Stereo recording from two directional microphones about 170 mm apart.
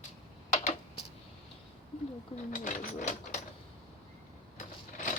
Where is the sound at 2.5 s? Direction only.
50° left (ahead or behind).